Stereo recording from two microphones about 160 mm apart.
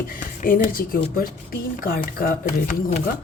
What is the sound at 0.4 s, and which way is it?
Speech, 60° left (ahead or behind).